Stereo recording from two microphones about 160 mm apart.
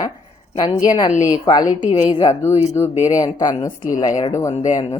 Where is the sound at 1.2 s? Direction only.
25° left (ahead or behind).